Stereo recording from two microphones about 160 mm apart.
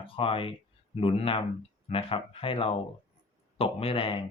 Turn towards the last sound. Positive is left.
turn(degrees=35)  # may be behind; listen again after turning